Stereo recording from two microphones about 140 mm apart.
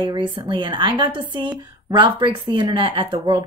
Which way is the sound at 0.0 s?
30° right (ahead or behind).